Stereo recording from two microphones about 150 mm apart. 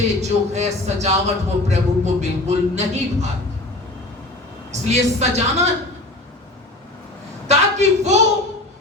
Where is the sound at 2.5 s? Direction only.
50° right (ahead or behind).